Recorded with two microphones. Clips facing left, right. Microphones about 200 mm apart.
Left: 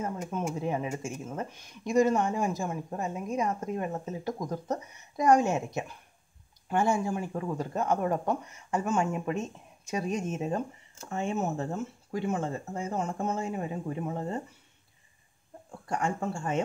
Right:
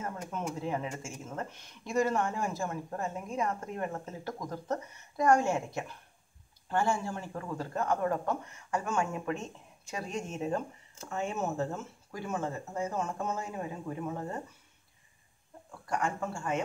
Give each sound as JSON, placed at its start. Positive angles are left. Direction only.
{"t": 0.0, "sound": "speech", "side_deg": 15}
{"t": 15.9, "sound": "speech", "side_deg": 30}